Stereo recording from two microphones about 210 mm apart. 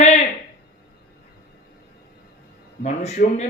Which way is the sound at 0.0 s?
35° left (ahead or behind).